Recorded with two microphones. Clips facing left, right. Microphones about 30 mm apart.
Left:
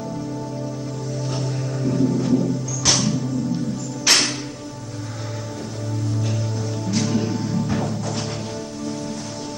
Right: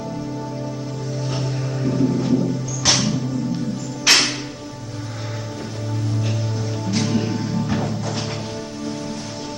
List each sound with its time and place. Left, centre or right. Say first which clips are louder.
1.3 s music: right 1 dB; centre
6.9 s music: right 1 dB; centre